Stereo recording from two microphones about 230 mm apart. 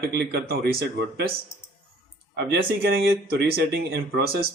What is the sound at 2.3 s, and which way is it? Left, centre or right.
Speech, right.